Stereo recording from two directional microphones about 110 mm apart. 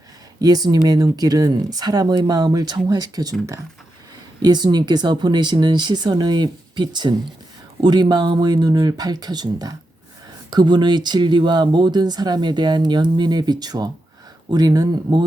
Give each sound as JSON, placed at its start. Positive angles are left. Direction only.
{"t": 0.4, "sound": "speech", "side_deg": -35}
{"t": 4.4, "sound": "speech", "side_deg": -40}